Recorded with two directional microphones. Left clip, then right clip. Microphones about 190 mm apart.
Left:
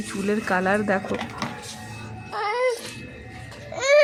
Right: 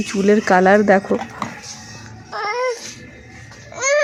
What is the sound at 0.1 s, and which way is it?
Speech, 30° right (ahead or behind).